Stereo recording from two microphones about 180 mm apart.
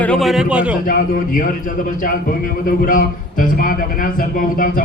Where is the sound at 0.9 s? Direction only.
50° left (ahead or behind).